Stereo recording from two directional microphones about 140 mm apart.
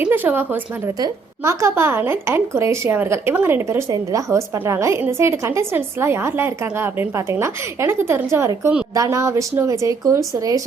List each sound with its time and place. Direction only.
0.0 s a woman's voice: 15° right (ahead or behind)
0.9 s a woman's voice: 25° right (ahead or behind)